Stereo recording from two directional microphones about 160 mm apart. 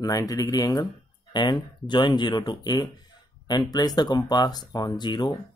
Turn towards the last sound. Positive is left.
turn(degrees=30)  # may be behind; listen again after turning